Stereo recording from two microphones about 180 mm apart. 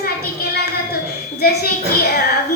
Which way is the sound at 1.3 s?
60° left (ahead or behind).